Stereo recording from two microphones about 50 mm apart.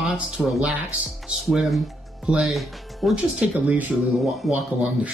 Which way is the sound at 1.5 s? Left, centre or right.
Centre.